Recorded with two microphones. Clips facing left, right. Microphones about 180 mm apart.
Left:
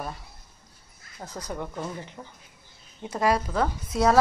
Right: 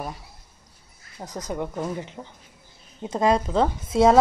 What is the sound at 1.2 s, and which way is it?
A woman's voice, 20° right (ahead or behind).